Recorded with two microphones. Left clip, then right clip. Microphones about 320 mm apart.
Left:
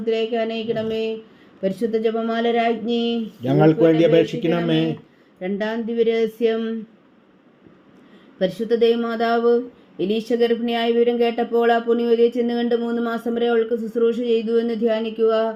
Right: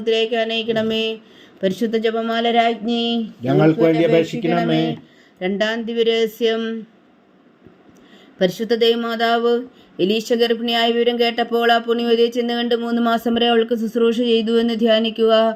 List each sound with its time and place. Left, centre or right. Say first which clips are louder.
0.0 s speech: right 3 dB; right
3.4 s speech: even; centre
5.4 s speech: right 4 dB; right
8.4 s speech: right 1 dB; right